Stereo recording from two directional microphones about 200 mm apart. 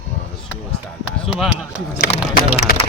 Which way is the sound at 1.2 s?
Centre (ahead or behind).